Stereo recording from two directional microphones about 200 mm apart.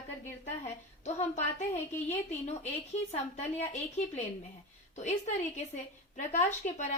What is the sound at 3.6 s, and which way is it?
A woman's voice, 35° left (ahead or behind).